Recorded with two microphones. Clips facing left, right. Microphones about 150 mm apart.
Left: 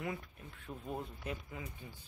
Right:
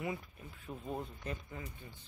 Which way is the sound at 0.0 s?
5° right (ahead or behind).